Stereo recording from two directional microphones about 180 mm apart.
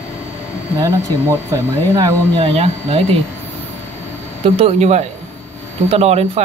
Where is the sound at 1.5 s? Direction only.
20° right (ahead or behind).